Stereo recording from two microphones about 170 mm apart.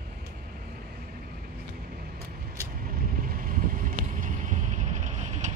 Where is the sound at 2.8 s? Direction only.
60° right (ahead or behind).